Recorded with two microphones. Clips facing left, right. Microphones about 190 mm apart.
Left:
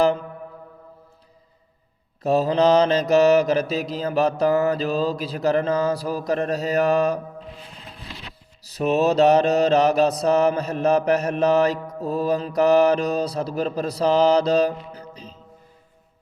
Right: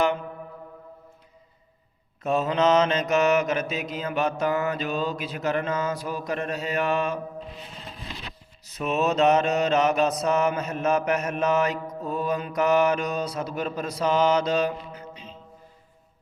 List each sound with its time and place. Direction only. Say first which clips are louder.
2.2 s mantra: left 4 dB; 35° left (ahead or behind)
8.6 s mantra: left 5 dB; 35° left (ahead or behind)